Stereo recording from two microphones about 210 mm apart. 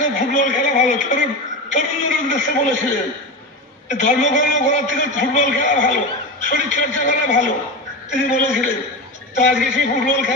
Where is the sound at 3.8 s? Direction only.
35° left (ahead or behind).